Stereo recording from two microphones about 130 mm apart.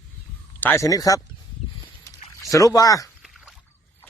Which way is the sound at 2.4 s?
25° left (ahead or behind).